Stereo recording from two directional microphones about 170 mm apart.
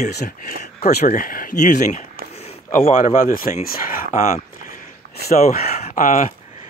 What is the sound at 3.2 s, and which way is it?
Speech, 55° left (ahead or behind).